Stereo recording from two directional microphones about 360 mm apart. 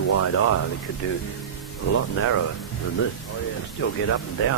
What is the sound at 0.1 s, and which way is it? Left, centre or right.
Speech, left.